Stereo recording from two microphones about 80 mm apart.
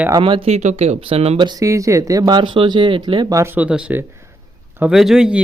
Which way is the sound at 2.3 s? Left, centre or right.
Right.